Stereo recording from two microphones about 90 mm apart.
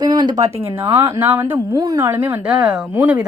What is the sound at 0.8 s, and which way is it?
Speech, 90° right.